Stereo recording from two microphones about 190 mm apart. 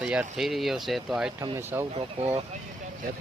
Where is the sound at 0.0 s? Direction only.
5° right (ahead or behind).